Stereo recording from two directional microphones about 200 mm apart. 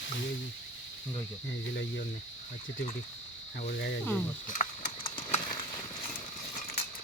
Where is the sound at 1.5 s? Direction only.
60° left (ahead or behind).